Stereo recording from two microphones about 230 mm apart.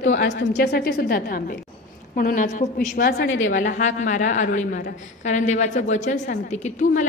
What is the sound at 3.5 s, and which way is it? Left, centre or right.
A woman's voice, left.